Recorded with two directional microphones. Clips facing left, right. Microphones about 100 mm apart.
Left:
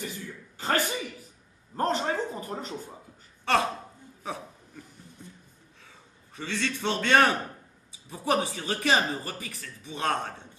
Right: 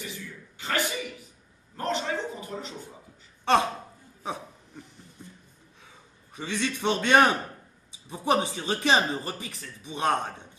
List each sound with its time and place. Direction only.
0.0 s a sound: 40° left (ahead or behind)
3.5 s speech: 20° right (ahead or behind)
4.2 s hiccup: 20° right (ahead or behind)
6.3 s a man's voice: 15° right (ahead or behind)